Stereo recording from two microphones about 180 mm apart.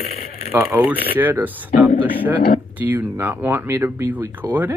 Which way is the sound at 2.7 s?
10° right (ahead or behind).